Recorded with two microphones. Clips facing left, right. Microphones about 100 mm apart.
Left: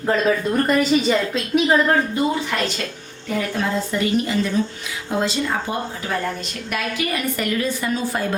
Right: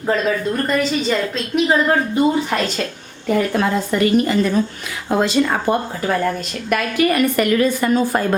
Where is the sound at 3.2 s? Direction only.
55° right (ahead or behind).